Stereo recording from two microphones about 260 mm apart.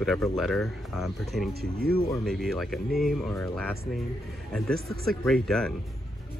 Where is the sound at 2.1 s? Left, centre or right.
Centre.